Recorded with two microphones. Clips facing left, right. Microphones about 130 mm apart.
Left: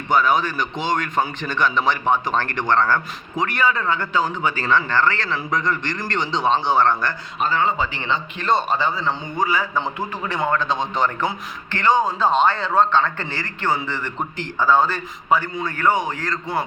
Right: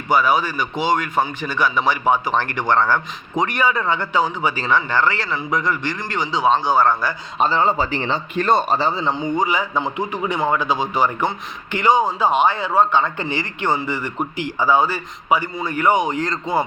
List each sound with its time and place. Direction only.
0.1 s speech: 10° right (ahead or behind)
7.3 s speech: 30° right (ahead or behind); by 8.8 s 50° right (ahead or behind)
8.8 s a man's voice: 25° right (ahead or behind)